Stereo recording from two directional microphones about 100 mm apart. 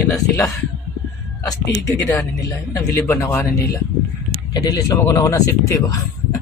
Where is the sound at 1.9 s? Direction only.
30° left (ahead or behind).